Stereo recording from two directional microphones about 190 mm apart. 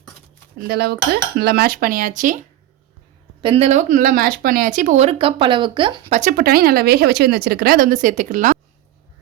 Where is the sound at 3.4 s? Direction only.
30° right (ahead or behind).